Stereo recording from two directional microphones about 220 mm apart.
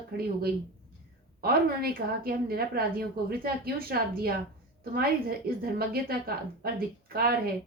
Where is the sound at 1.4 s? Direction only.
45° right (ahead or behind).